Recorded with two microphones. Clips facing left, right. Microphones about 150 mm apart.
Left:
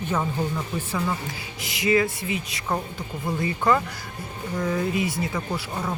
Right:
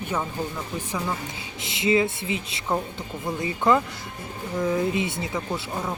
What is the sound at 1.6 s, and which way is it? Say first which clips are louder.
Speech: even; 25° right (ahead or behind).